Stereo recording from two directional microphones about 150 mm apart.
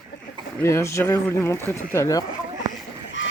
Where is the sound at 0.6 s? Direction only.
20° left (ahead or behind).